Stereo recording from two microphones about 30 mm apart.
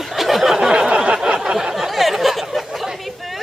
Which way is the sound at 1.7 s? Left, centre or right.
Centre.